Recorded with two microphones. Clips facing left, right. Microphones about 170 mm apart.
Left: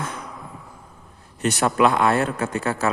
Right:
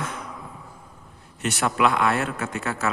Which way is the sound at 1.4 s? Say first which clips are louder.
Left 4 dB; 40° left (ahead or behind).